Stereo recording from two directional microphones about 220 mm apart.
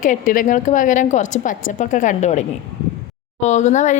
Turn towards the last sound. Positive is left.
turn(degrees=35)  # may be behind; listen again after turning